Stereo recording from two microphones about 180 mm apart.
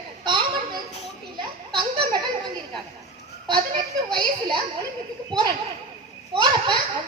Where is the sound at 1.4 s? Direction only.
25° right (ahead or behind).